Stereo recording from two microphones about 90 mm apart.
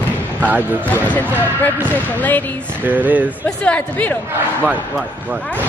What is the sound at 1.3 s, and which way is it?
Speech, 20° left (ahead or behind).